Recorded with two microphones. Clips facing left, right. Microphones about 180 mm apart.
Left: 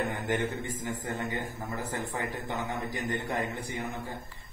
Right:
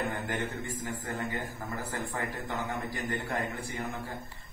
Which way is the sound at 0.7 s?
15° left (ahead or behind).